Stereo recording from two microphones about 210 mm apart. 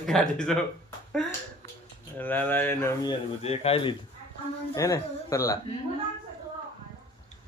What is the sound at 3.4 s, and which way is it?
Speech, 30° left (ahead or behind).